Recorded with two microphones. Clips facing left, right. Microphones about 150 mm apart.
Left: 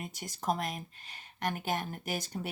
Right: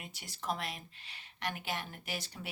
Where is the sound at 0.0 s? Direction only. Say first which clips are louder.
Left 6 dB; 45° left (ahead or behind).